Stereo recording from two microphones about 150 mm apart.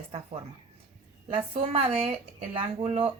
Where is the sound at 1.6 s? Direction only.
40° right (ahead or behind).